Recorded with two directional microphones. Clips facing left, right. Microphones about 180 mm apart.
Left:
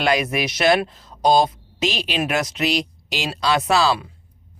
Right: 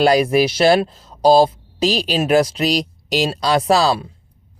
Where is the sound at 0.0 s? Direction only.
35° right (ahead or behind).